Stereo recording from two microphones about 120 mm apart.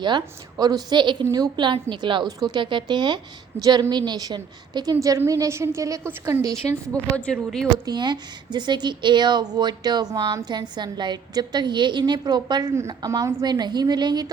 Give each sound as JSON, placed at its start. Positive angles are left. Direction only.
{"t": 0.0, "sound": "a woman's voice", "side_deg": -35}
{"t": 7.2, "sound": "speech", "side_deg": 5}
{"t": 7.9, "sound": "speech", "side_deg": -35}
{"t": 12.7, "sound": "a woman's voice", "side_deg": -25}